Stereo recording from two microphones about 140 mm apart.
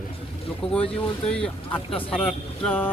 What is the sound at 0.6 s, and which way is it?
Speech, 40° left (ahead or behind).